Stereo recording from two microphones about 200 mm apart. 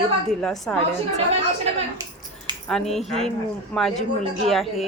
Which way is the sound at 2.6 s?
Centre (ahead or behind).